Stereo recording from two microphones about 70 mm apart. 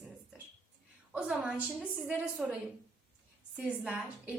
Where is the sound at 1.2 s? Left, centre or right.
Centre.